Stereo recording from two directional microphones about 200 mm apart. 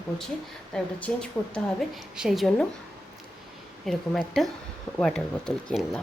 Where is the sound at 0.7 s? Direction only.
5° left (ahead or behind).